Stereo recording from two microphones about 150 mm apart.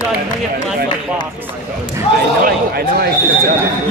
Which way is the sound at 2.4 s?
90° right.